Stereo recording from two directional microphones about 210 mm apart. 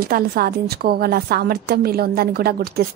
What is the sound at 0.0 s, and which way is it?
A woman's voice, 45° right (ahead or behind).